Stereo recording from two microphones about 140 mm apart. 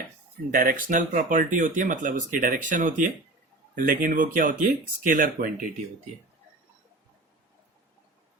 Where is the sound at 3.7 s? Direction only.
85° right.